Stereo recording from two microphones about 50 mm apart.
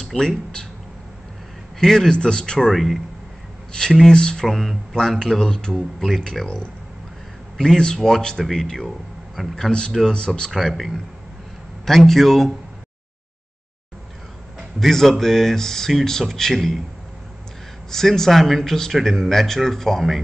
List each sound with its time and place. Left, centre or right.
0.0 s a sound: centre
1.8 s speech: centre
2.7 s speech: centre
3.7 s speech: centre
4.5 s speech: centre
6.4 s speech: centre
10.5 s speech: centre
14.8 s speech: centre
17.9 s speech: centre